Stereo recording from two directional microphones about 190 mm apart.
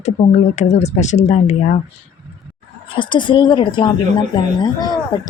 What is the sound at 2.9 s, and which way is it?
A woman's voice, 25° left (ahead or behind).